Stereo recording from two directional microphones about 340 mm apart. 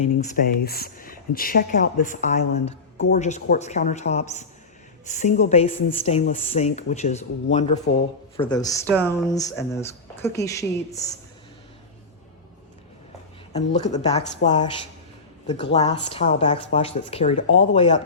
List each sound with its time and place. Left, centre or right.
0.0 s speech: left
13.5 s speech: centre
15.7 s speech: centre